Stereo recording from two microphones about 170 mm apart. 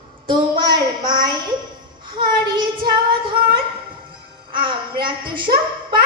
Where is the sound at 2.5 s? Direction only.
25° right (ahead or behind).